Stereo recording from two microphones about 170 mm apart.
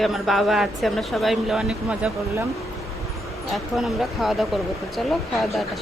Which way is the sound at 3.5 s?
Centre (ahead or behind).